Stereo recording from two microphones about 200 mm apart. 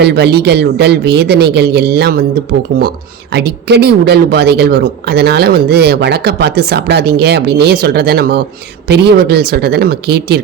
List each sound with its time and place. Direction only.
0.0 s speech: 55° right (ahead or behind)